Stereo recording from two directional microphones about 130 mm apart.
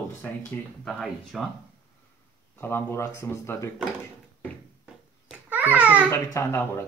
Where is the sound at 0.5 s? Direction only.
15° left (ahead or behind).